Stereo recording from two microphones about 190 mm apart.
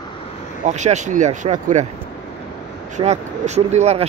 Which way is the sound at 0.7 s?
40° right (ahead or behind).